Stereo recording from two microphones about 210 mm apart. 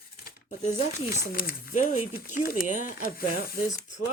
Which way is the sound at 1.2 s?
45° left (ahead or behind).